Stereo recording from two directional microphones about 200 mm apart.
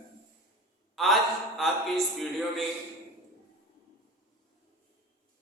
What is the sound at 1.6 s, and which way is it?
A man's voice, centre (ahead or behind).